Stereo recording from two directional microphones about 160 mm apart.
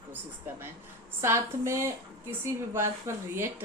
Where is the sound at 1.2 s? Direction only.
15° right (ahead or behind).